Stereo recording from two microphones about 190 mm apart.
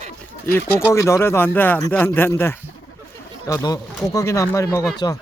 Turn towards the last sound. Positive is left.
turn(degrees=20)  # may be behind; listen again after turning